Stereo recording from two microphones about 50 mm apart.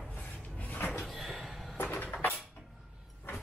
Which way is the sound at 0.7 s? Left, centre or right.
Left.